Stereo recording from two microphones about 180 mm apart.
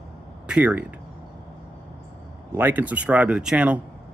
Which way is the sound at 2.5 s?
10° right (ahead or behind).